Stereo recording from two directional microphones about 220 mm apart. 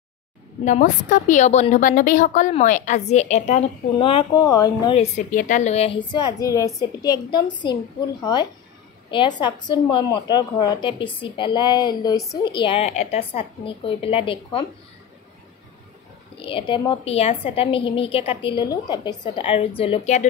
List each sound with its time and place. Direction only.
0.7 s a woman's voice: 35° left (ahead or behind); by 4.9 s 15° left (ahead or behind)
4.9 s a woman's voice: 35° left (ahead or behind)
16.3 s a woman's voice: 25° left (ahead or behind)